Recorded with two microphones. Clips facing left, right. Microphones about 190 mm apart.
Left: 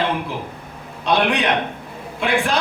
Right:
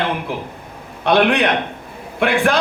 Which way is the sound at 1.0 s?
65° right (ahead or behind).